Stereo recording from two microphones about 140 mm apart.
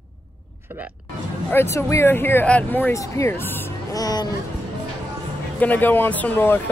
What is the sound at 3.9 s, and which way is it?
Speech, 25° left (ahead or behind).